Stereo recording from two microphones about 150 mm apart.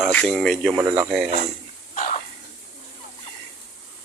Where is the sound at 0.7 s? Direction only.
15° right (ahead or behind).